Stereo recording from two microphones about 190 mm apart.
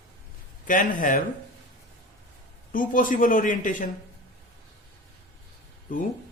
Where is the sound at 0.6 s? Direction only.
45° left (ahead or behind).